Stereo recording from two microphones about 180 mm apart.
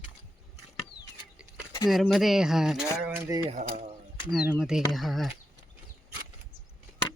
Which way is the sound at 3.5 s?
40° right (ahead or behind).